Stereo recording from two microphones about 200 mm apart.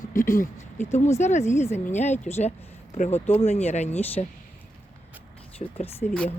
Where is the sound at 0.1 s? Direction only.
40° left (ahead or behind).